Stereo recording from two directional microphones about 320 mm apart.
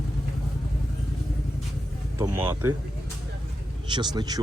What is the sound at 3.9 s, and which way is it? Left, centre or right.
Speech, centre.